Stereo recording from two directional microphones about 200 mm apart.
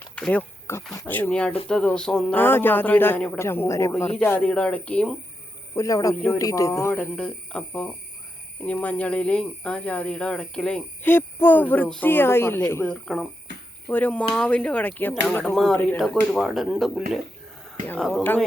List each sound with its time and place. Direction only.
0.0 s speech: 5° left (ahead or behind)
5.7 s speech: 15° left (ahead or behind)